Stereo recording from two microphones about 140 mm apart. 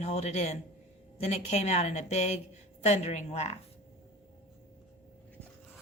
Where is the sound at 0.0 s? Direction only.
50° left (ahead or behind).